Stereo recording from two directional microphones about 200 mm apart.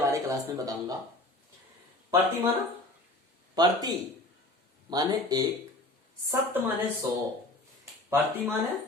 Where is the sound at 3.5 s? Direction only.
20° right (ahead or behind).